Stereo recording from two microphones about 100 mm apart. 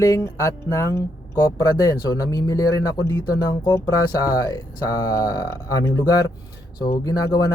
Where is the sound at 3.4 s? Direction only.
45° left (ahead or behind).